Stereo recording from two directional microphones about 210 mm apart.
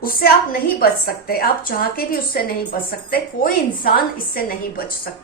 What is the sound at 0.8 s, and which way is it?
A woman's voice, 45° left (ahead or behind).